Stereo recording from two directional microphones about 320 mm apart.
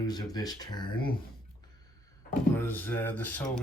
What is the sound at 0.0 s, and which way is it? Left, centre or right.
Speech, centre.